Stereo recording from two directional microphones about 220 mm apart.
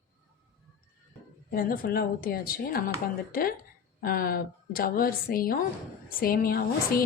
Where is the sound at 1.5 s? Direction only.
40° left (ahead or behind).